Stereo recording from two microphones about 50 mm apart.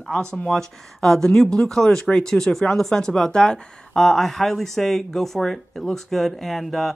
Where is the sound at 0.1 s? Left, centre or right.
Left.